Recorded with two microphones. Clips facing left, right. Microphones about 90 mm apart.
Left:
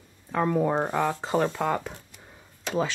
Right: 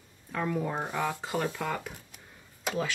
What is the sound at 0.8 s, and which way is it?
Speech, 70° left (ahead or behind).